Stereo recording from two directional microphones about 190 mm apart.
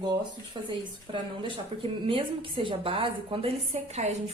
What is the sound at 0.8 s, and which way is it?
A woman's voice, 25° right (ahead or behind).